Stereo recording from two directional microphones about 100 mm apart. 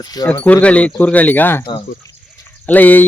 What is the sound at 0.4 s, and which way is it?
Speech, 15° left (ahead or behind).